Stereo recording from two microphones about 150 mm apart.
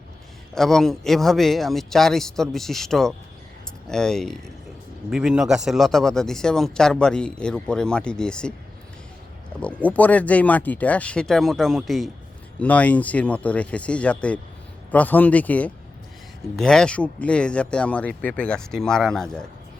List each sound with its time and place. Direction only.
0.5 s a man's voice: 5° left (ahead or behind)
9.6 s a man's voice: 10° left (ahead or behind)